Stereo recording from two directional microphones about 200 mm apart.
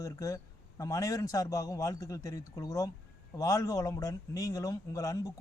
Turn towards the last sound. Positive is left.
turn(degrees=15)  # may be behind; listen again after turning